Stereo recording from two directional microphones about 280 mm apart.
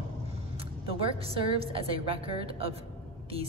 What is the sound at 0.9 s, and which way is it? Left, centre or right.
A woman's voice, centre.